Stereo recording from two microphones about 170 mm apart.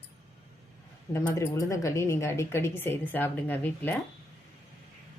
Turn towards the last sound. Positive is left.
turn(degrees=10)  # may be behind; listen again after turning